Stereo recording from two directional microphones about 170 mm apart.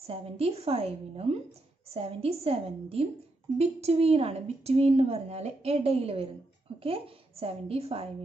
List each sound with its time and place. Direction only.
0.0 s a woman's voice: 35° right (ahead or behind)